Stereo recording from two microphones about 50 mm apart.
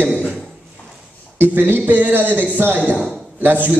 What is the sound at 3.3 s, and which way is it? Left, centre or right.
Speech, right.